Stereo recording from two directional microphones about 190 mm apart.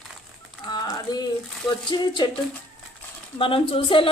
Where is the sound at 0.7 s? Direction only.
20° left (ahead or behind).